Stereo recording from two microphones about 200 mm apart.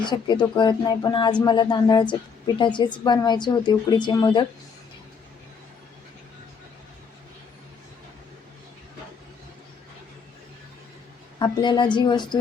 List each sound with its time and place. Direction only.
0.0 s speech: 20° left (ahead or behind)
11.3 s speech: 20° left (ahead or behind)